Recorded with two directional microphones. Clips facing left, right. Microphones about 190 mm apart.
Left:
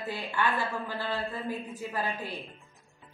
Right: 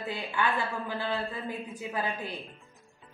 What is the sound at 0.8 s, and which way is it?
Speech, 15° right (ahead or behind).